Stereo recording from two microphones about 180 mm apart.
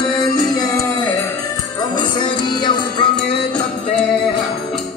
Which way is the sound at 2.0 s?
25° left (ahead or behind).